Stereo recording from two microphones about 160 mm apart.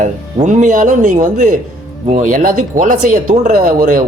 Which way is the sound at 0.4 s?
50° right (ahead or behind).